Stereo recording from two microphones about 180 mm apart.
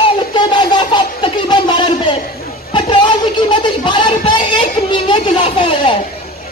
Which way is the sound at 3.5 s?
25° left (ahead or behind).